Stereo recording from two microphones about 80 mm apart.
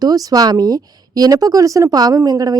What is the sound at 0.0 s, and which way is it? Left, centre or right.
A woman's voice, right.